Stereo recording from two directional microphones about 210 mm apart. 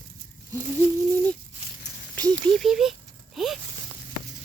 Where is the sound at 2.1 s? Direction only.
5° left (ahead or behind).